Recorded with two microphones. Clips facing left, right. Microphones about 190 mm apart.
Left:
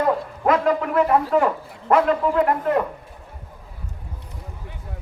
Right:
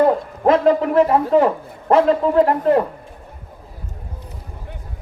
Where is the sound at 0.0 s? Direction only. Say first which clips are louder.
Right 5 dB; 30° right (ahead or behind).